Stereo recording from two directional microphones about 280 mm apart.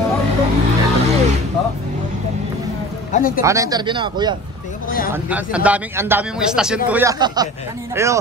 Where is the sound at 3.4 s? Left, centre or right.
Centre.